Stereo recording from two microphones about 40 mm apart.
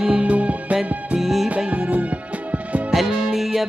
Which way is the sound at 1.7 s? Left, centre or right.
Right.